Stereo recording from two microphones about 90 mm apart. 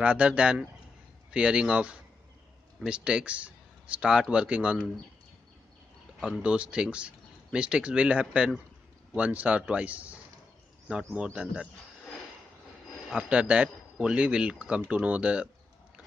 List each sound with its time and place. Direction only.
0.0 s a man's voice: 15° right (ahead or behind)
6.1 s speech: centre (ahead or behind)
6.4 s a man's voice: 10° right (ahead or behind)
11.1 s a man's voice: 10° right (ahead or behind)
13.1 s a man's voice: 10° right (ahead or behind)